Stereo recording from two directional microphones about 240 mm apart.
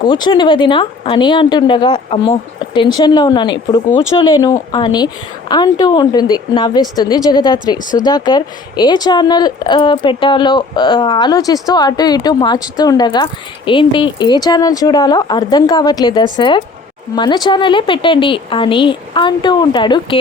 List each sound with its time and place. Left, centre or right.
0.0 s a woman's voice: centre